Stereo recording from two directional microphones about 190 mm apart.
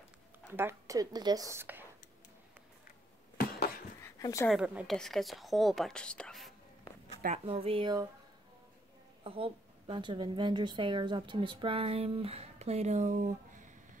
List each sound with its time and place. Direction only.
0.5 s a woman's voice: 10° right (ahead or behind)
3.3 s a sound: 55° left (ahead or behind)
4.0 s dog: 15° left (ahead or behind)
4.5 s a woman's voice: 5° right (ahead or behind)
7.2 s a woman's voice: 30° right (ahead or behind)
9.2 s a woman's voice: 30° right (ahead or behind)